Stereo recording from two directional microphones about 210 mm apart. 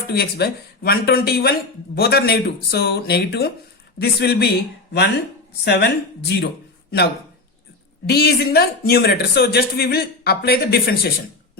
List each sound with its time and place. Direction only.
0.1 s a man's voice: 50° left (ahead or behind)
5.6 s a man's voice: 55° left (ahead or behind)
8.0 s a man's voice: 50° left (ahead or behind)